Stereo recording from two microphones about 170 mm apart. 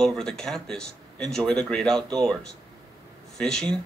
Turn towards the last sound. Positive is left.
turn(degrees=5)  # may be behind; listen again after turning